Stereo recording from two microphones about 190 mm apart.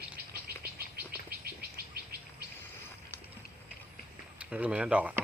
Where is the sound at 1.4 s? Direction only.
55° right (ahead or behind).